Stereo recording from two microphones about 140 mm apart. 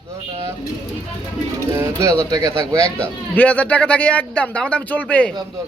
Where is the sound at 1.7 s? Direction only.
20° right (ahead or behind).